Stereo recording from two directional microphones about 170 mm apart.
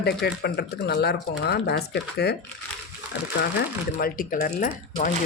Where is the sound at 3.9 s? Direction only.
55° left (ahead or behind).